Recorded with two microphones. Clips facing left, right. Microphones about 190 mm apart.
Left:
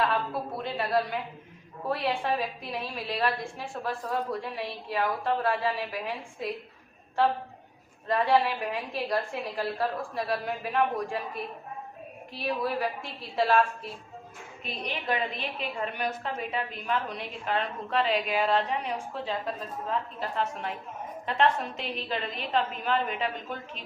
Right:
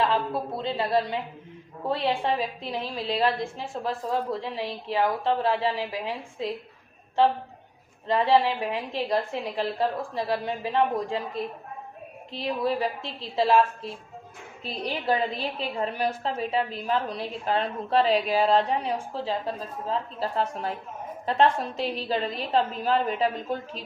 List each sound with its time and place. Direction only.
0.0 s a woman's voice: 25° right (ahead or behind)
8.0 s a woman's voice: 25° right (ahead or behind)
14.6 s a woman's voice: 35° right (ahead or behind)